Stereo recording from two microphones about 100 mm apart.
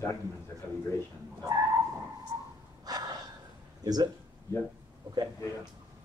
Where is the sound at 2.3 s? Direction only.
35° right (ahead or behind).